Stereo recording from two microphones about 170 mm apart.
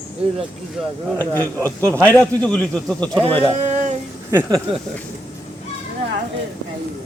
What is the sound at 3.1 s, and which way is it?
Speech, 30° right (ahead or behind).